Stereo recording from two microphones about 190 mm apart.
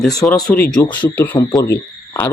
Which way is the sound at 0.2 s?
10° left (ahead or behind).